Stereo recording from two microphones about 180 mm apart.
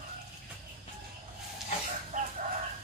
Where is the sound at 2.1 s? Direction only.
45° right (ahead or behind).